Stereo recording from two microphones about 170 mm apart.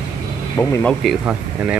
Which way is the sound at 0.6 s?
15° left (ahead or behind).